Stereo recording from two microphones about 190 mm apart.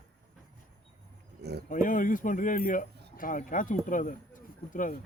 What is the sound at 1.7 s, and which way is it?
Speech, 45° left (ahead or behind).